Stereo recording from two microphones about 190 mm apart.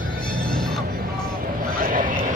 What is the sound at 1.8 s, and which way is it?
Vehicle, 45° right (ahead or behind).